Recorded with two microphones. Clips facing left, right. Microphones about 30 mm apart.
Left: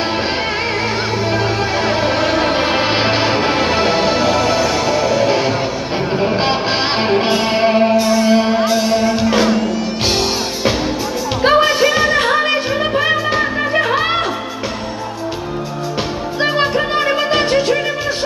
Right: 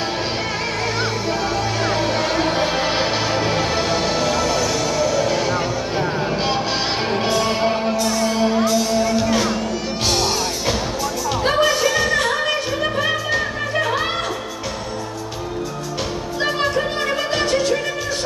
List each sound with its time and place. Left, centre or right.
1.6 s music: left
11.4 s music: left
16.3 s music: left